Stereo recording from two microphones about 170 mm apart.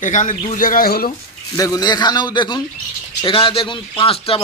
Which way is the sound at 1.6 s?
20° left (ahead or behind).